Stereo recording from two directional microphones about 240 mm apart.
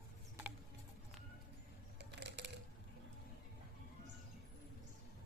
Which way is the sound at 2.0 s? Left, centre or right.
Right.